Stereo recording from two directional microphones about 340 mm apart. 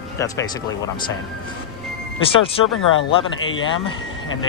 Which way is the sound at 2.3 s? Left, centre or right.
Centre.